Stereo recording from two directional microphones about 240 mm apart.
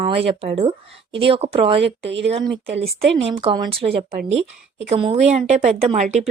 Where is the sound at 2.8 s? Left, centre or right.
Right.